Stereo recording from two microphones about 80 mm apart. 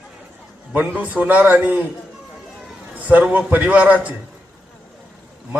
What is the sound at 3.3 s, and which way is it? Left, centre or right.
Speech, right.